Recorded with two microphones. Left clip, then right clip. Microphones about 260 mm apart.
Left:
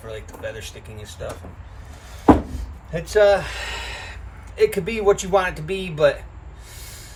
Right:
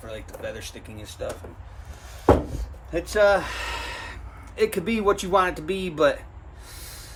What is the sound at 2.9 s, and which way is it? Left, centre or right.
Speech, centre.